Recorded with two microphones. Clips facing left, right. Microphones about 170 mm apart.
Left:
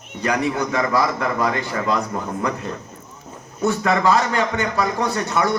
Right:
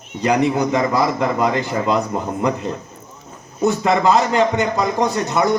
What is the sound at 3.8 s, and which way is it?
A man's voice, 20° right (ahead or behind).